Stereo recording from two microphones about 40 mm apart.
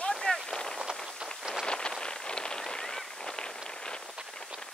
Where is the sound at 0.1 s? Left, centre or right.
Centre.